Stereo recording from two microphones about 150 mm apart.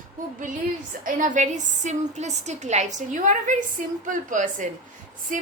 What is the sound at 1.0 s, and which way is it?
A woman's voice, 60° right (ahead or behind).